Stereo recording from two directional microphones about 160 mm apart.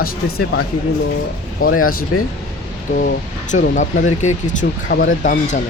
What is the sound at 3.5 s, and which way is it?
Speech, 50° left (ahead or behind).